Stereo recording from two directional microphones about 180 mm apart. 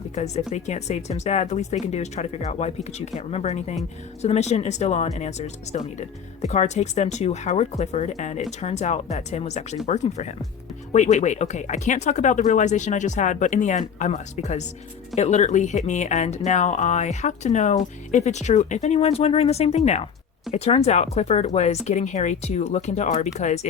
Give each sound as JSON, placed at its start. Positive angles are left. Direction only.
{"t": 0.1, "sound": "speech", "side_deg": 40}